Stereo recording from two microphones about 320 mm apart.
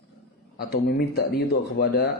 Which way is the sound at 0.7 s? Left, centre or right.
Left.